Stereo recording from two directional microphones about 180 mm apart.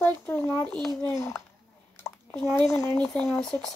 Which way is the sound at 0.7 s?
Centre (ahead or behind).